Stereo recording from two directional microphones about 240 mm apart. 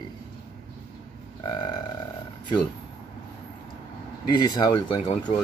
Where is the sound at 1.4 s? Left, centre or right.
Centre.